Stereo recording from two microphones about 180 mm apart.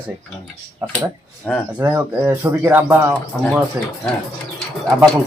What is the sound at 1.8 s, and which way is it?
Speech, 15° right (ahead or behind).